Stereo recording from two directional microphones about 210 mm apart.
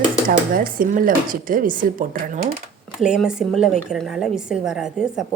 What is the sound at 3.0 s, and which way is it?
Speech, 5° right (ahead or behind).